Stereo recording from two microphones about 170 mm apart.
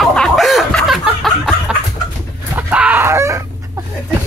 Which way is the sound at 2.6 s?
10° right (ahead or behind).